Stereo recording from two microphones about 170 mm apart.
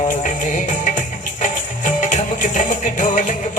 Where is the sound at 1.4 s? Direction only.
50° left (ahead or behind).